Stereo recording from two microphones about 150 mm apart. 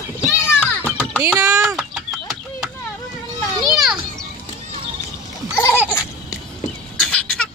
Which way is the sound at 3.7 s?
5° right (ahead or behind).